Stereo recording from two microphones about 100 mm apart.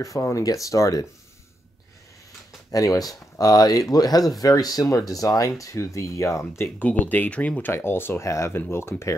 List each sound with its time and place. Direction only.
0.0 s speech: 35° left (ahead or behind)
2.7 s speech: 35° left (ahead or behind)
6.8 s speech: 15° left (ahead or behind)
7.7 s speech: 25° left (ahead or behind)